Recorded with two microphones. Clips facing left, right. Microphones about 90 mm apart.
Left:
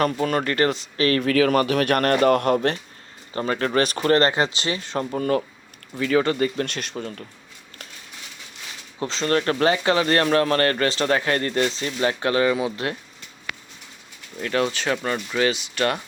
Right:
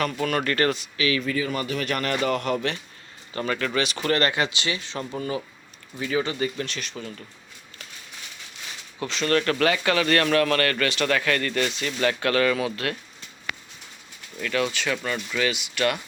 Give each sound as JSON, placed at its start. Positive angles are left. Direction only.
{"t": 0.0, "sound": "speech", "side_deg": 30}
{"t": 0.9, "sound": "speech", "side_deg": 45}
{"t": 1.2, "sound": "speech", "side_deg": 70}
{"t": 3.3, "sound": "speech", "side_deg": 30}
{"t": 6.0, "sound": "speech", "side_deg": 55}
{"t": 9.0, "sound": "speech", "side_deg": 30}
{"t": 14.3, "sound": "speech", "side_deg": 35}